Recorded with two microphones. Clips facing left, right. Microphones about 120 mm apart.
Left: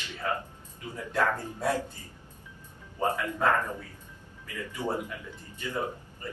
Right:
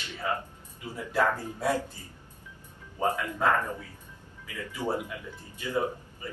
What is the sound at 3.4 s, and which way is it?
Speech, 15° right (ahead or behind).